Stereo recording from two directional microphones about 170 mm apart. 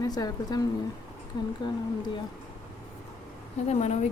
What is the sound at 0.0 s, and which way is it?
Speech, 20° left (ahead or behind).